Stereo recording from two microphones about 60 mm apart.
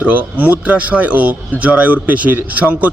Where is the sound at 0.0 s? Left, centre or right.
Right.